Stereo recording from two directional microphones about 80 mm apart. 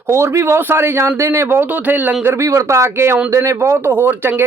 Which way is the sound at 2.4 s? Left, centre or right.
Right.